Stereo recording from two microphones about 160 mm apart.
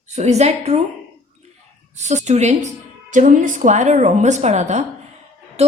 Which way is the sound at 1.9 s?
45° right (ahead or behind).